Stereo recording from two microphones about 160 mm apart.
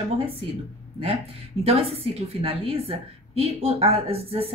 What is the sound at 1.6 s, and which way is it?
A woman's voice, 40° right (ahead or behind).